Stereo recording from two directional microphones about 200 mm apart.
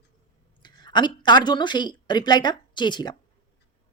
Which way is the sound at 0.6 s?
20° left (ahead or behind).